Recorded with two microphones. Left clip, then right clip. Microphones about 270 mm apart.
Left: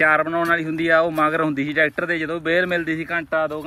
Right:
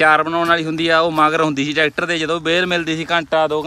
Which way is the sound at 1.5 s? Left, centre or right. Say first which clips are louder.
Right 2 dB; right.